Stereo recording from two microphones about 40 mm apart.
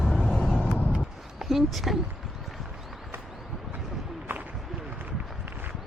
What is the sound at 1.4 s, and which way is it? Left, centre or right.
Speech, centre.